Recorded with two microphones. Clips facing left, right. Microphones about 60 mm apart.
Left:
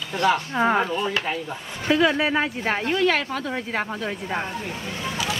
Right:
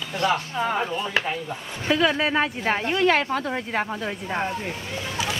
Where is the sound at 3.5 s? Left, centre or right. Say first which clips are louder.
Right 1 dB; centre.